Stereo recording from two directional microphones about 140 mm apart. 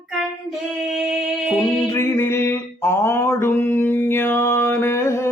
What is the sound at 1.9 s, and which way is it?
Mantra, 15° left (ahead or behind).